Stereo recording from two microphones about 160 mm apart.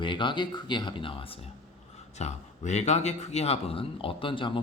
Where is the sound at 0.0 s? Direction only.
30° left (ahead or behind).